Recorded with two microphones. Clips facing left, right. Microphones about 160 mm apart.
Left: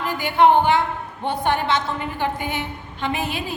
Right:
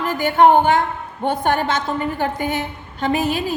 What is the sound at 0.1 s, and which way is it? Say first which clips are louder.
A woman's voice: right 3 dB; 45° right (ahead or behind).